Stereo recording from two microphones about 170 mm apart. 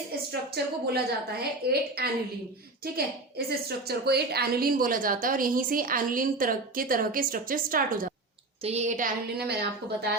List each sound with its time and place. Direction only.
0.3 s a woman's voice: 70° right (ahead or behind)
8.6 s a woman's voice: 40° right (ahead or behind)
9.4 s a woman's voice: 70° right (ahead or behind)